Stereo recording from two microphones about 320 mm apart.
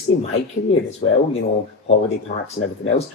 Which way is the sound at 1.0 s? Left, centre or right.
Centre.